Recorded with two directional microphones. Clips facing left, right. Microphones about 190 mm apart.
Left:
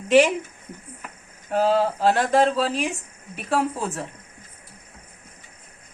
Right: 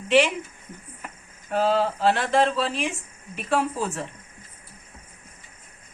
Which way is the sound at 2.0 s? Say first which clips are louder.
Left 2 dB; 40° left (ahead or behind).